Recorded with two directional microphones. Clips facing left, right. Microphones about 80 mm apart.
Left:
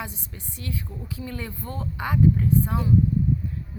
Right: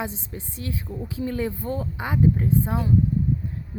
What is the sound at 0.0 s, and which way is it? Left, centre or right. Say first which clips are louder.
A woman's voice: right 5 dB; right.